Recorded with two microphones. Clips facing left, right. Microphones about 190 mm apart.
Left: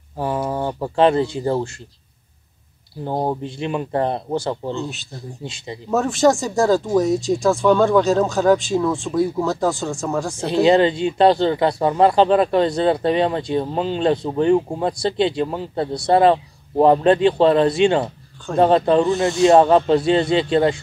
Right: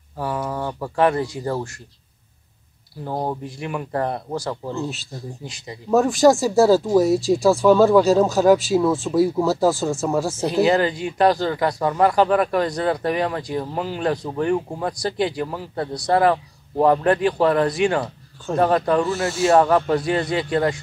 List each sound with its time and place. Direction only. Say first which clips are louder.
0.2 s speech: left 3 dB; 25° left (ahead or behind)
3.0 s speech: left 3 dB; 25° left (ahead or behind)
5.9 s speech: right 2 dB; centre (ahead or behind)
10.5 s speech: left 4 dB; 25° left (ahead or behind)